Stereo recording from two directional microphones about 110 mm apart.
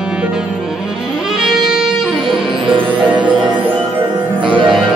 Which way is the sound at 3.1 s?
15° right (ahead or behind).